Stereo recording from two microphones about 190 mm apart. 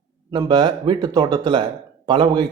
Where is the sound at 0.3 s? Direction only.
20° right (ahead or behind).